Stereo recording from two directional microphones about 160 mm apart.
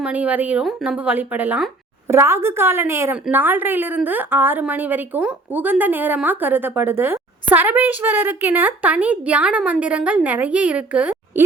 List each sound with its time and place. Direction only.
0.0 s a woman's voice: 10° right (ahead or behind)